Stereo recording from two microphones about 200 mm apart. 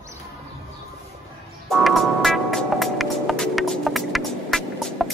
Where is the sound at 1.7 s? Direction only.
Centre (ahead or behind).